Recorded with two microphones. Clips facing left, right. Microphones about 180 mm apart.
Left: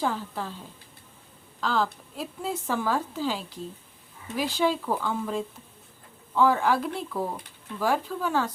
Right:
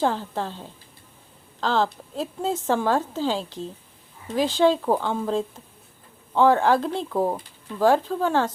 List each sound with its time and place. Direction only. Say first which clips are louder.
0.0 s a woman's voice: right 5 dB; 30° right (ahead or behind)
7.1 s speech: right 11 dB; 40° right (ahead or behind)
7.8 s a woman's voice: right 7 dB; 30° right (ahead or behind)